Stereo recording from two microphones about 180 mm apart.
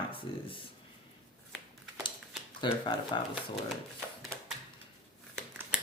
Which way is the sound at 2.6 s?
25° left (ahead or behind).